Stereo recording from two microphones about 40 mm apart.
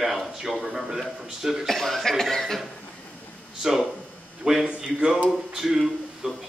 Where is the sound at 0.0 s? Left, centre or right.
Centre.